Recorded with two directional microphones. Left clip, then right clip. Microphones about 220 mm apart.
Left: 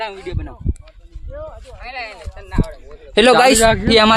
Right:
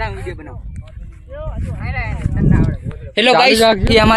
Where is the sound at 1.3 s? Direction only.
20° right (ahead or behind).